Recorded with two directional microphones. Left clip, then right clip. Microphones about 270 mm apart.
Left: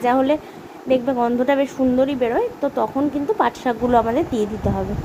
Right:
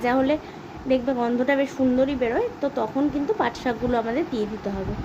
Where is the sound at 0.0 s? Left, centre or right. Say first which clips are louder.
Left 4 dB; centre.